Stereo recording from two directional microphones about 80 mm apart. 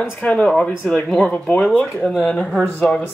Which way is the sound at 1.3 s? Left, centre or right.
Centre.